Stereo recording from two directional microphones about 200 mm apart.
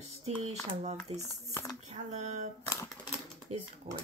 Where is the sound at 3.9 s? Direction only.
50° right (ahead or behind).